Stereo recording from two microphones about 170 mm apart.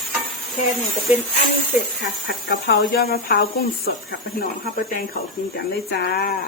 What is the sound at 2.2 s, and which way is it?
Speech, 65° left (ahead or behind).